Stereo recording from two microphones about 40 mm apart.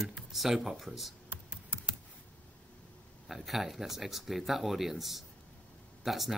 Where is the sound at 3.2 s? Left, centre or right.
Centre.